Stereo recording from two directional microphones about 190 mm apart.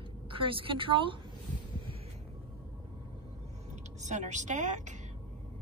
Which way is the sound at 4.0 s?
40° right (ahead or behind).